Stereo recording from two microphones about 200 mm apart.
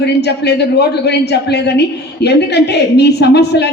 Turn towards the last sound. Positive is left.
turn(degrees=55)  # may be behind; listen again after turning